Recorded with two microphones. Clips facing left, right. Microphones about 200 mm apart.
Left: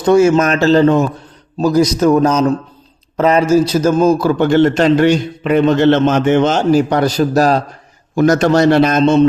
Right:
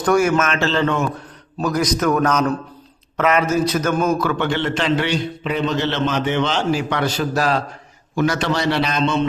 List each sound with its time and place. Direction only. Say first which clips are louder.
0.0 s a man's voice: left 7 dB; 25° left (ahead or behind)
1.5 s a man's voice: left 7 dB; 25° left (ahead or behind); by 9.2 s 45° left (ahead or behind)